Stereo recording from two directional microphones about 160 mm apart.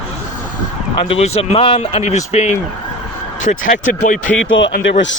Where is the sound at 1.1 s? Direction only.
40° left (ahead or behind).